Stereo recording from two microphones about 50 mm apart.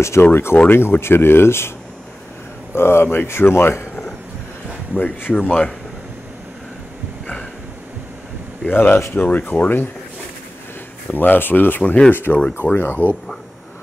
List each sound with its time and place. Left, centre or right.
0.0 s speech: left
0.3 s speech: left
2.7 s speech: left
4.9 s speech: left
8.6 s speech: left
11.1 s speech: left